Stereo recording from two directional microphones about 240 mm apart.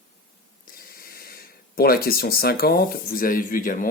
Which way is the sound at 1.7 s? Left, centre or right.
Left.